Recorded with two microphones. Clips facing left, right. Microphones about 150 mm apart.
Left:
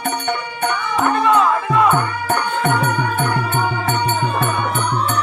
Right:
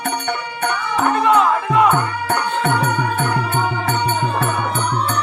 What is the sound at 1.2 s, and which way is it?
Music, 20° right (ahead or behind).